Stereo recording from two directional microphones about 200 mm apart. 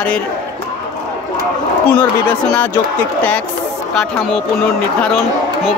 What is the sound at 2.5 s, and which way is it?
Speech, 10° left (ahead or behind).